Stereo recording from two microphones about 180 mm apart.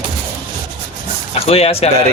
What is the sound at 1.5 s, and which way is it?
Speech, 35° left (ahead or behind).